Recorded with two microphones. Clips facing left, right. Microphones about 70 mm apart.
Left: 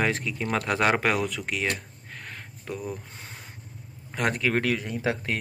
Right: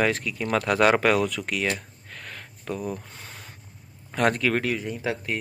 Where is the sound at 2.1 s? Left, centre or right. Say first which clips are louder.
Even; left.